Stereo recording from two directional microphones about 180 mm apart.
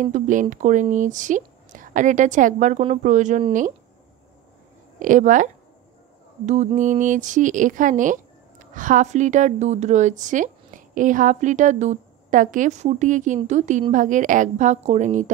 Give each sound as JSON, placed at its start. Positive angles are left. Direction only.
{"t": 0.0, "sound": "speech", "side_deg": -45}
{"t": 4.9, "sound": "speech", "side_deg": -45}